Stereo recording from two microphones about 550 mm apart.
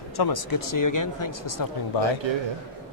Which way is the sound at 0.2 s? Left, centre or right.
Left.